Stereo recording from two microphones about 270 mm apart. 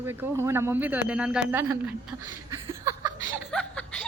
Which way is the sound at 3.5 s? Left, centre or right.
Centre.